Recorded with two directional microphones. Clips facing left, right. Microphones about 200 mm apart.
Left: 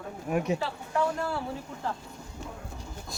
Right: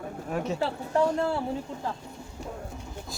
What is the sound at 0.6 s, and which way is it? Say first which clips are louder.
Speech: right 4 dB; 30° right (ahead or behind).